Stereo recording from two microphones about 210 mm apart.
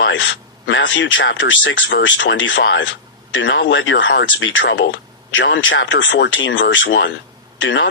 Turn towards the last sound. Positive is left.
turn(degrees=65)  # may be behind; listen again after turning